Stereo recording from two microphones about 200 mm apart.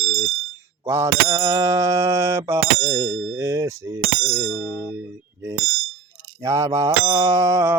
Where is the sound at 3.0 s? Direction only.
70° right (ahead or behind).